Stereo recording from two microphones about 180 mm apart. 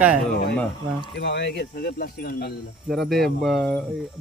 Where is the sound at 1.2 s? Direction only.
70° left (ahead or behind).